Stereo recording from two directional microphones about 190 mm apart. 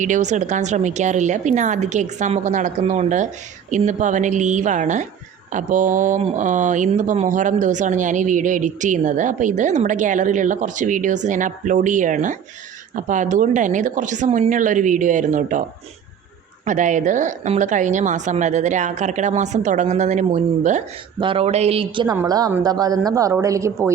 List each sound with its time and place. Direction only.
0.0 s speech: 40° right (ahead or behind)
16.6 s speech: 40° right (ahead or behind)
21.2 s speech: 30° right (ahead or behind)